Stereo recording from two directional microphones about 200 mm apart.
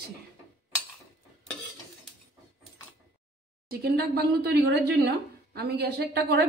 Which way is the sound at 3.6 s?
50° right (ahead or behind).